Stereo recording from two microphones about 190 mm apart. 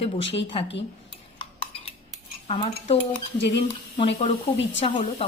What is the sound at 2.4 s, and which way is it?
Cutlery, 30° left (ahead or behind).